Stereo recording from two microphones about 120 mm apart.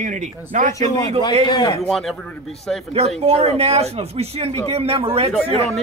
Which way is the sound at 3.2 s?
60° right (ahead or behind).